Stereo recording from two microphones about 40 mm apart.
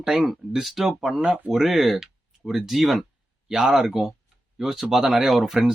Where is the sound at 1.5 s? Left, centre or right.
Centre.